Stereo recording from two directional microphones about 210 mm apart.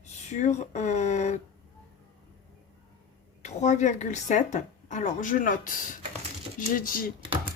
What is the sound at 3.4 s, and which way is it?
Speech, 35° left (ahead or behind).